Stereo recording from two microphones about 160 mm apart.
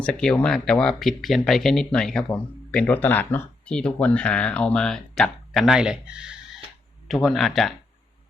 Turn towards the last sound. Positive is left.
turn(degrees=0)  # may be behind; listen again after turning